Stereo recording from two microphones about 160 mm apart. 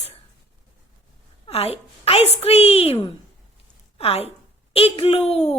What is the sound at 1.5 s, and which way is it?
A woman's voice, 40° left (ahead or behind).